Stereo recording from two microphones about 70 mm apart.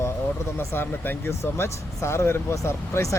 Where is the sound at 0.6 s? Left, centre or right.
Left.